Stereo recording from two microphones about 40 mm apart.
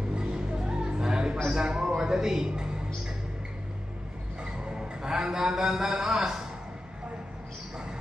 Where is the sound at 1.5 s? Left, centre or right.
Centre.